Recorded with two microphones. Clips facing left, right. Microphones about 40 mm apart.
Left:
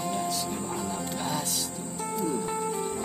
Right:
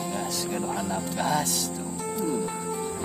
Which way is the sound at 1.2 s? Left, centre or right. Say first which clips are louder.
Right 7 dB; right.